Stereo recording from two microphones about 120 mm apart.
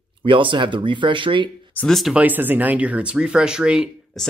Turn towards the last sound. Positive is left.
turn(degrees=-5)  # may be behind; listen again after turning